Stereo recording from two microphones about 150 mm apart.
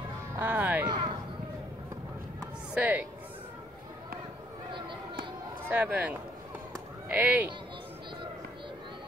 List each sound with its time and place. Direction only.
0.4 s music: 10° right (ahead or behind)
0.8 s a sound: 35° right (ahead or behind)
2.7 s speech: 10° right (ahead or behind)
5.7 s speech: 10° right (ahead or behind)